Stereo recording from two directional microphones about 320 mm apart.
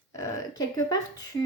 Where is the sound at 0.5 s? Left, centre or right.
Centre.